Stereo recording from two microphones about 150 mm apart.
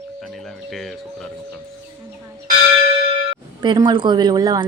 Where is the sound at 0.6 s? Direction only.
Centre (ahead or behind).